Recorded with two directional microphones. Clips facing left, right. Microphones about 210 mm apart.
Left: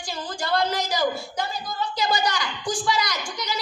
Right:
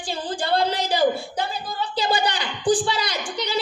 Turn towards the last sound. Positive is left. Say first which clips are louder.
# right 5 dB
turn(degrees=-30)  # may be behind; listen again after turning